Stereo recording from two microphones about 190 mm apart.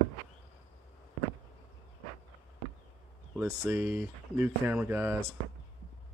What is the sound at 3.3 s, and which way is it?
Speech, 10° right (ahead or behind).